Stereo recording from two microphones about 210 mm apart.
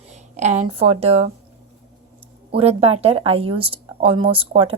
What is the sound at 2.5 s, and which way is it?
A woman's voice, 30° right (ahead or behind).